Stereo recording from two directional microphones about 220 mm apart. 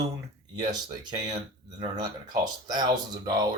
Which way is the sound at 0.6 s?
20° right (ahead or behind).